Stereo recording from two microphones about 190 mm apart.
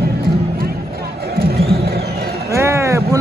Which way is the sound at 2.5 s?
15° right (ahead or behind).